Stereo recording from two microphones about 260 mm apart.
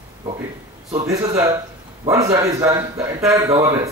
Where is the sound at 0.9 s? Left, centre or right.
Centre.